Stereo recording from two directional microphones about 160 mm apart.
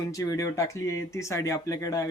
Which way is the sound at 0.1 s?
20° left (ahead or behind).